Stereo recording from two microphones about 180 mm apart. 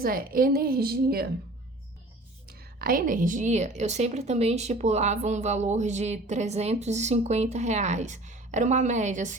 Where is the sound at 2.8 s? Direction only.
50° right (ahead or behind).